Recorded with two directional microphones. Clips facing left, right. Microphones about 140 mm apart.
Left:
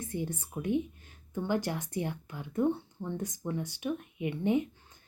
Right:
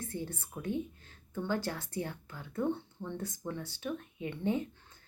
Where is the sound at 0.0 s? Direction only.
15° left (ahead or behind).